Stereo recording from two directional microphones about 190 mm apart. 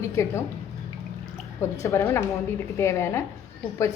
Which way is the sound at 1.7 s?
15° left (ahead or behind).